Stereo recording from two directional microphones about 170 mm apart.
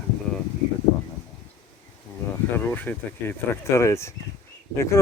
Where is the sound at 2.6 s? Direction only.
10° left (ahead or behind).